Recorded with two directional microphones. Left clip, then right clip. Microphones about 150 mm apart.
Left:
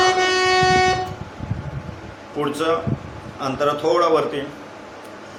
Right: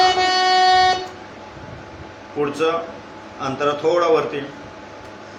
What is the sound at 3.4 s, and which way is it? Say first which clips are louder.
Speech: even; 35° left (ahead or behind).